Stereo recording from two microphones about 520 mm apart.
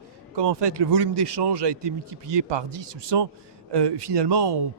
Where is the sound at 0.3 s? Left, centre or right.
Right.